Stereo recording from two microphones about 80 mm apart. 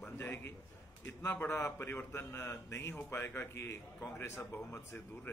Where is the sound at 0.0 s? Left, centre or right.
Left.